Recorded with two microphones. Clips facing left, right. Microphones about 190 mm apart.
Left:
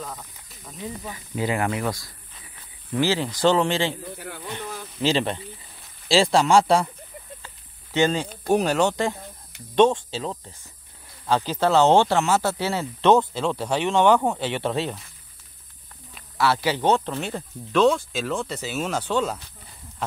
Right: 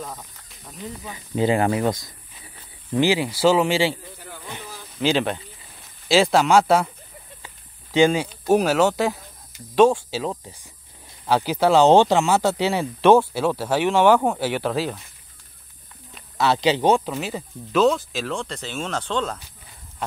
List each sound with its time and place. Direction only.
0.0 s snake: 5° right (ahead or behind)
1.1 s speech: 25° right (ahead or behind); by 3.9 s 10° right (ahead or behind)
4.2 s a sound: 60° left (ahead or behind)
5.0 s speech: centre (ahead or behind)
7.4 s a sound: 10° right (ahead or behind)
8.5 s speech: 5° right (ahead or behind)
16.3 s speech: 20° right (ahead or behind); by 19.4 s 10° left (ahead or behind)